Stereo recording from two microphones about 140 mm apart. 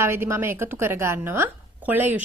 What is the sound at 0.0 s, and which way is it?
A woman's voice, 15° right (ahead or behind).